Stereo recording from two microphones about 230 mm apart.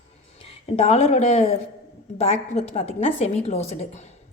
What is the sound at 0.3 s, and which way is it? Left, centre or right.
A woman's voice, left.